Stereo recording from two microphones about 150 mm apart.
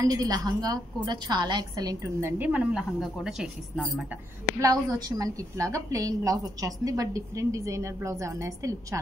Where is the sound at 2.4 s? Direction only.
10° right (ahead or behind).